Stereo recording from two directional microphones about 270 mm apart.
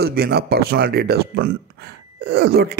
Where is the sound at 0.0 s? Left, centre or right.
Right.